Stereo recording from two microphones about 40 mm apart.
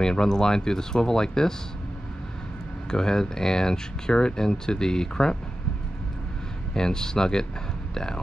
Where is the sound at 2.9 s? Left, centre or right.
Centre.